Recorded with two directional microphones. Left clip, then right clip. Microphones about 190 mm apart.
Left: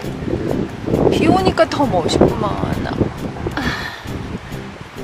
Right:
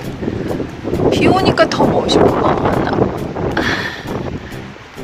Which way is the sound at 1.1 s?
Centre (ahead or behind).